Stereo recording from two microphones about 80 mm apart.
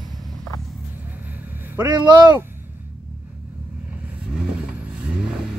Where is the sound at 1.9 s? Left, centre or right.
Right.